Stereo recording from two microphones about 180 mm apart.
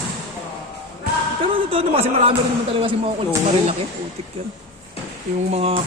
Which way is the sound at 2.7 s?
30° right (ahead or behind).